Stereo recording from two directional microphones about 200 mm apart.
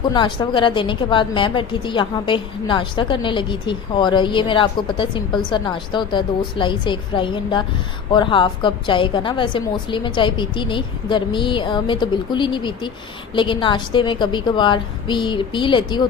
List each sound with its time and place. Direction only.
0.1 s a woman's voice: 20° left (ahead or behind)